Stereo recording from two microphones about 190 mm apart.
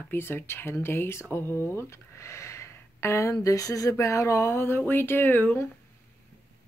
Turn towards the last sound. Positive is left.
turn(degrees=10)  # may be behind; listen again after turning